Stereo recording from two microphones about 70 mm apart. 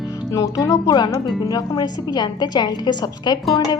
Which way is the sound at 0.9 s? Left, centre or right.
Left.